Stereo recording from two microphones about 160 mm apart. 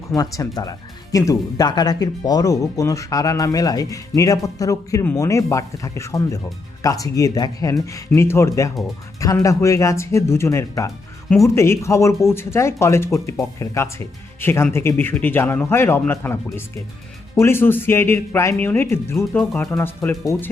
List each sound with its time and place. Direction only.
0.1 s speech: 20° left (ahead or behind)